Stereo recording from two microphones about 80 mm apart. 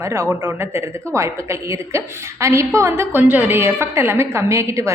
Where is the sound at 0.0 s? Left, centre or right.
Right.